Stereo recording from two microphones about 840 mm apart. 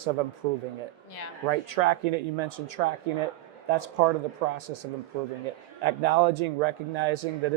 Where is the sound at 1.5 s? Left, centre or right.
Right.